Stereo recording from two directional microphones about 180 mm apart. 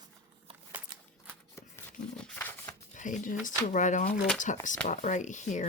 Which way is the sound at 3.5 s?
45° left (ahead or behind).